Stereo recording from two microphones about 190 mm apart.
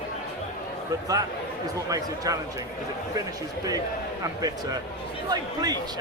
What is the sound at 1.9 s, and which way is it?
Speech, 20° right (ahead or behind).